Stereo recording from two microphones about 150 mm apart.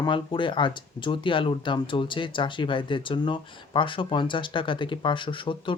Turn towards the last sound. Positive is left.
turn(degrees=35)  # may be behind; listen again after turning